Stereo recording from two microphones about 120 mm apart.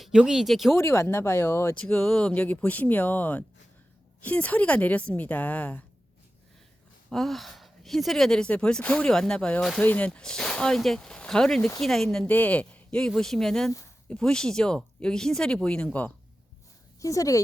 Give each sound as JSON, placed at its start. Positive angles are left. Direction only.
{"t": 0.0, "sound": "speech", "side_deg": -5}
{"t": 0.8, "sound": "speech", "side_deg": 25}
{"t": 1.8, "sound": "speech", "side_deg": 5}
{"t": 7.1, "sound": "speech", "side_deg": 0}
{"t": 17.0, "sound": "speech", "side_deg": 30}